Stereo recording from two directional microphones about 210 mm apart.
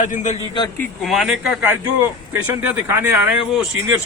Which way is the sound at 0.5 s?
20° left (ahead or behind).